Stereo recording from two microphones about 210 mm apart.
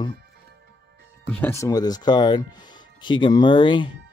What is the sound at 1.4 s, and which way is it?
Speech, 15° left (ahead or behind).